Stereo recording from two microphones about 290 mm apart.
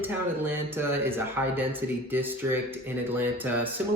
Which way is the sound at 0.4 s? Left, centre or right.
Centre.